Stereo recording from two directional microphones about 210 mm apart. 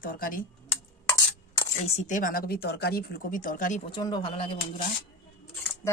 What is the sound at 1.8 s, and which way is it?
Speech, 35° left (ahead or behind).